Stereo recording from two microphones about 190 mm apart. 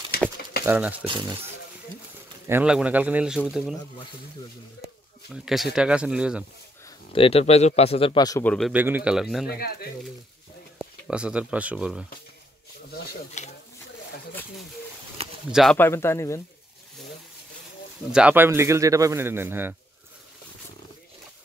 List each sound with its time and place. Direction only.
0.1 s patter: 55° left (ahead or behind)
0.7 s speech: 10° right (ahead or behind)
1.0 s speech: 25° right (ahead or behind)
2.4 s speech: 10° right (ahead or behind)
5.3 s speech: centre (ahead or behind)
7.1 s speech: 30° left (ahead or behind)
8.5 s speech: centre (ahead or behind)
8.7 s speech: 10° right (ahead or behind)
9.6 s speech: 55° left (ahead or behind)
10.8 s speech: 5° right (ahead or behind)
13.4 s speech: 35° left (ahead or behind)
15.5 s speech: centre (ahead or behind)
15.8 s speech: 15° left (ahead or behind)
18.1 s speech: 10° right (ahead or behind)